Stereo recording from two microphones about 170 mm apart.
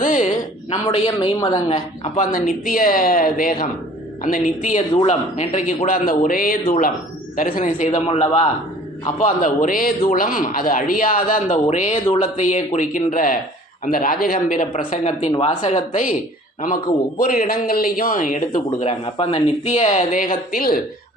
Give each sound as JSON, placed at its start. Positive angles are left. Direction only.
{"t": 0.0, "sound": "a sound", "side_deg": 50}
{"t": 0.9, "sound": "a man's voice", "side_deg": 35}
{"t": 2.1, "sound": "a man's voice", "side_deg": 50}
{"t": 9.1, "sound": "a man's voice", "side_deg": 50}
{"t": 17.2, "sound": "a man's voice", "side_deg": 55}